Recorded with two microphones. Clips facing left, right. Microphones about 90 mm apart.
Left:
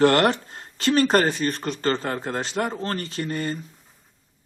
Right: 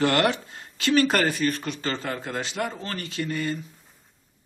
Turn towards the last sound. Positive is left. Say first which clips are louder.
# left 1 dB
turn(degrees=40)  # may be behind; listen again after turning